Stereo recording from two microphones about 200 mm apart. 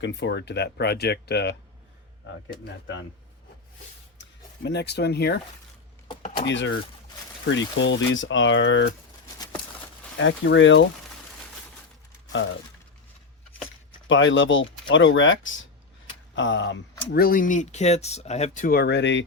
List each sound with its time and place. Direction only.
0.0 s speech: 60° left (ahead or behind)
4.6 s speech: 60° left (ahead or behind)
6.4 s speech: 65° left (ahead or behind)
7.8 s speech: 65° left (ahead or behind)
10.2 s speech: 70° left (ahead or behind)
14.1 s speech: 70° left (ahead or behind)
17.1 s speech: 50° left (ahead or behind)